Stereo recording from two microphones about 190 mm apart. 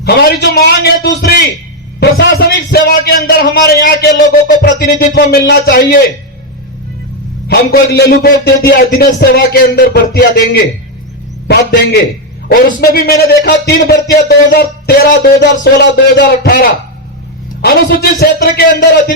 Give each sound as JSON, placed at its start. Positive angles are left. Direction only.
{"t": 0.0, "sound": "music", "side_deg": 60}
{"t": 2.0, "sound": "a man's voice", "side_deg": 60}
{"t": 7.4, "sound": "music", "side_deg": 55}
{"t": 12.5, "sound": "a man's voice", "side_deg": 50}
{"t": 15.6, "sound": "music", "side_deg": 65}
{"t": 16.4, "sound": "a man's voice", "side_deg": 50}
{"t": 17.6, "sound": "music", "side_deg": 55}